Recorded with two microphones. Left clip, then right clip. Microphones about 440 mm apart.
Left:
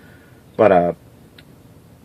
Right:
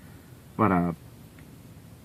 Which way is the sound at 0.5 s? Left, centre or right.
Centre.